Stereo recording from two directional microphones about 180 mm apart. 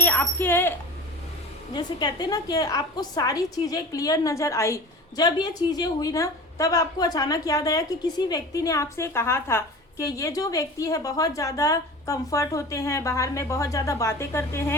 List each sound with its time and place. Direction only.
0.0 s speech: 10° left (ahead or behind)
1.7 s a woman's voice: 20° left (ahead or behind)